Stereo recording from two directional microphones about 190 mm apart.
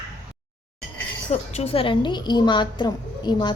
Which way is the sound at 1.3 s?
35° left (ahead or behind).